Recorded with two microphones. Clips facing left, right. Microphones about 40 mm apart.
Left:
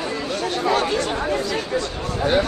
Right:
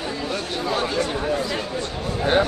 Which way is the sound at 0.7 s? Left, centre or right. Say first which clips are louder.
Left 2 dB; left.